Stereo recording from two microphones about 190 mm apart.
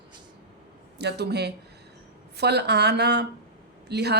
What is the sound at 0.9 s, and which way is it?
Speech, 60° right (ahead or behind).